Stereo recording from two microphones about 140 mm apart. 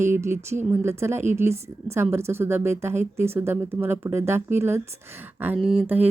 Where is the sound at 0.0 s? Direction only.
20° right (ahead or behind).